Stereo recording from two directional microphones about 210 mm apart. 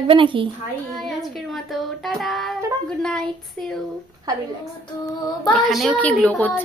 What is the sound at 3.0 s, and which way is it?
Speech, centre (ahead or behind).